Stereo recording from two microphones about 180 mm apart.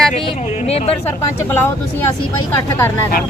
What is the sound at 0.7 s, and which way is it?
Speech, 35° left (ahead or behind).